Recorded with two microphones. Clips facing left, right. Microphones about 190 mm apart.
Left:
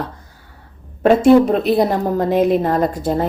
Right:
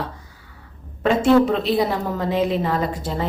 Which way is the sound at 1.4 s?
50° left (ahead or behind).